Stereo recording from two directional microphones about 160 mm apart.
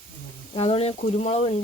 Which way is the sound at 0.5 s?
35° left (ahead or behind).